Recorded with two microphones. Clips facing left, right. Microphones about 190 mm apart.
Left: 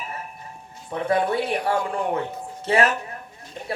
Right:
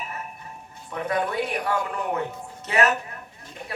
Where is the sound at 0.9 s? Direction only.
30° left (ahead or behind).